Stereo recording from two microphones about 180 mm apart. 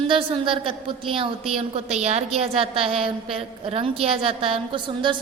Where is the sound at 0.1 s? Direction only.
30° right (ahead or behind).